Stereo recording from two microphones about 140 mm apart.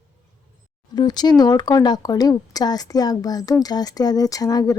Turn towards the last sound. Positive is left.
turn(degrees=25)  # may be behind; listen again after turning